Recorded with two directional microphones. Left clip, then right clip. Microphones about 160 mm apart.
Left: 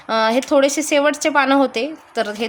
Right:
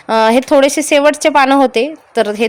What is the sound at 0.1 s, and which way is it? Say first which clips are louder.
A woman's voice: right 6 dB; 35° right (ahead or behind).